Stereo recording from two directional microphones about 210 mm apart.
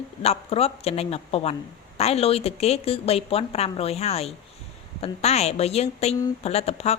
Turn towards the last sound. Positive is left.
turn(degrees=30)  # may be behind; listen again after turning